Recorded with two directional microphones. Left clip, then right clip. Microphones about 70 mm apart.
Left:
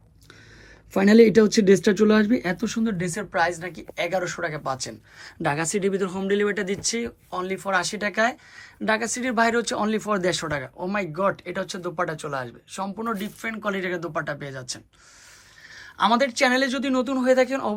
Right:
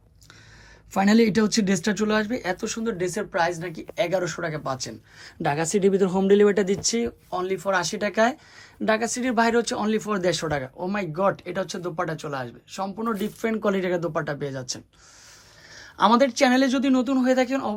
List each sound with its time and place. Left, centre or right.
0.9 s speech: right
3.0 s speech: right
8.9 s speech: right
13.1 s speech: right
16.9 s speech: right